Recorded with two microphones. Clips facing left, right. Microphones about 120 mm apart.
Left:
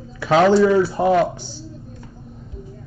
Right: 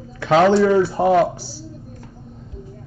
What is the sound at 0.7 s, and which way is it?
Speech, 25° right (ahead or behind).